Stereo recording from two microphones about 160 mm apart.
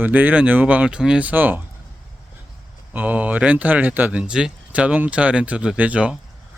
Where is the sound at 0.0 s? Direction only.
10° right (ahead or behind).